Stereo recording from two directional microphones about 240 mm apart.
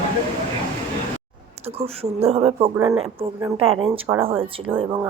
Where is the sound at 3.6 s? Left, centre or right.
Right.